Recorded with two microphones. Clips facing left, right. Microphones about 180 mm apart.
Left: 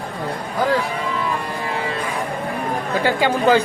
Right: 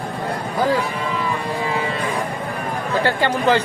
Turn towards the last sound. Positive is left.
turn(degrees=10)  # may be behind; listen again after turning